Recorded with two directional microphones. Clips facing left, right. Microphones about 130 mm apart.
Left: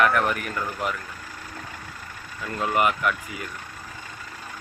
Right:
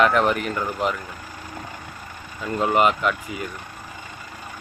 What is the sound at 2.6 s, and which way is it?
Speech, 25° right (ahead or behind).